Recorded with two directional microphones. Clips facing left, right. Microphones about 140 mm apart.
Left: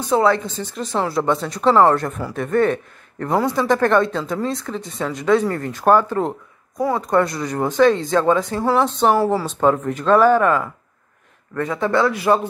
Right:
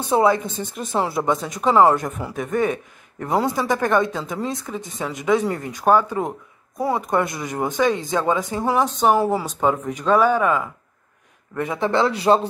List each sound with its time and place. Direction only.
0.0 s a man's voice: 20° right (ahead or behind)
6.8 s a man's voice: 20° right (ahead or behind)
9.6 s speech: 5° right (ahead or behind)
11.5 s a man's voice: 20° right (ahead or behind)